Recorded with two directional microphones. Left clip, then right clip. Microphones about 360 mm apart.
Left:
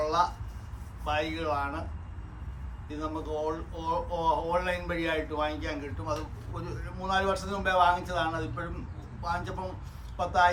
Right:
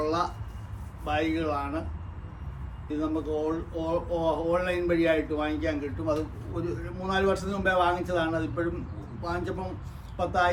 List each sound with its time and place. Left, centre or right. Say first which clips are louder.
1.0 s a man's voice: right 2 dB; centre
2.9 s a man's voice: right 5 dB; centre